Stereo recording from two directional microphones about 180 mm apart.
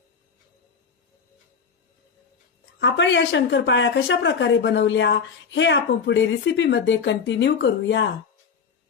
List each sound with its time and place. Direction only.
2.8 s speech: 85° left